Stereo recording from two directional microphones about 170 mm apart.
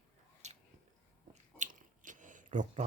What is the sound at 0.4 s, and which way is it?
Biting, 40° right (ahead or behind).